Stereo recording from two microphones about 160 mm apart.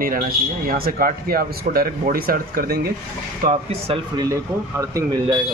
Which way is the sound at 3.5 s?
40° right (ahead or behind).